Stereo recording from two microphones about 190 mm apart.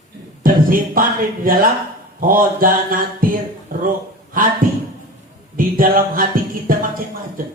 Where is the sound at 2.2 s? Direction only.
45° right (ahead or behind).